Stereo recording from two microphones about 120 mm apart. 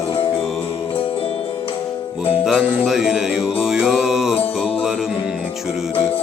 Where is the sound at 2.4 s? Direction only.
5° right (ahead or behind).